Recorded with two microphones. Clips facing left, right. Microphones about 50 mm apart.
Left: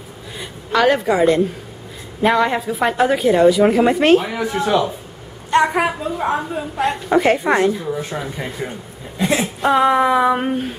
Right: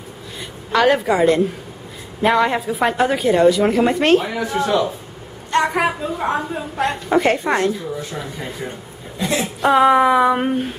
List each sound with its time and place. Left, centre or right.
0.7 s a woman's voice: centre; by 9.5 s left
9.6 s a woman's voice: centre